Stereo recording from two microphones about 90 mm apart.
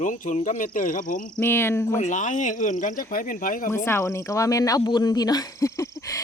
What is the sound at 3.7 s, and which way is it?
Speech, 30° left (ahead or behind).